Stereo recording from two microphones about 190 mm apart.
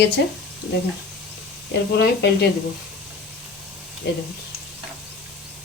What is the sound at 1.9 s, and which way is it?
Speech, 60° left (ahead or behind).